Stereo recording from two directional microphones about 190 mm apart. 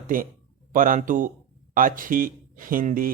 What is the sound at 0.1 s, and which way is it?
A man's voice, 45° right (ahead or behind).